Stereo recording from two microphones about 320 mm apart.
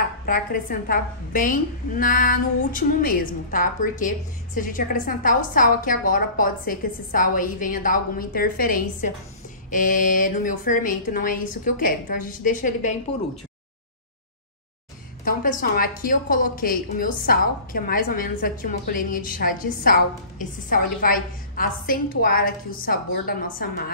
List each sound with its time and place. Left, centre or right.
0.2 s a woman's voice: left
15.2 s a woman's voice: left